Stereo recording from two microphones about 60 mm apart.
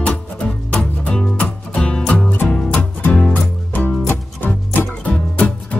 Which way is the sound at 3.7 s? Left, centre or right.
Left.